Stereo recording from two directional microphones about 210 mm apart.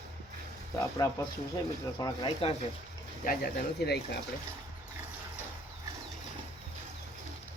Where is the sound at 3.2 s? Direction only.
50° left (ahead or behind).